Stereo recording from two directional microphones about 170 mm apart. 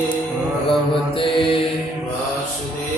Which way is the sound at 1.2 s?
30° left (ahead or behind).